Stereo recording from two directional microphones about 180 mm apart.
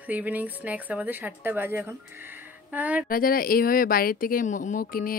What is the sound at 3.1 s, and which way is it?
Speech, 50° left (ahead or behind).